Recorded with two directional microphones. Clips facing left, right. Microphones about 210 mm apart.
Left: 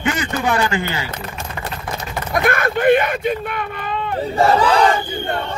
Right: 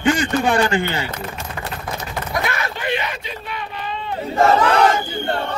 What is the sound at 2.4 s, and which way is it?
Speech, 50° left (ahead or behind).